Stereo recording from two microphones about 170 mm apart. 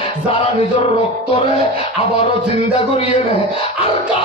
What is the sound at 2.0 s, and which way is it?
Music, 35° left (ahead or behind).